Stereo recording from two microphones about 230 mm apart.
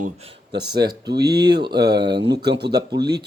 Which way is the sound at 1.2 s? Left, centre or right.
Centre.